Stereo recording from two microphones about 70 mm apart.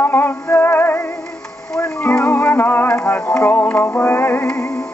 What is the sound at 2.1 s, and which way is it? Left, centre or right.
Music, centre.